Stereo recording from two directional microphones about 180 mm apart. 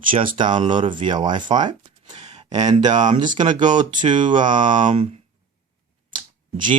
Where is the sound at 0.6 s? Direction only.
25° right (ahead or behind).